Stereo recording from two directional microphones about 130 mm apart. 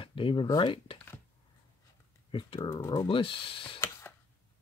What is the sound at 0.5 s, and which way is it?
Speech, 35° left (ahead or behind).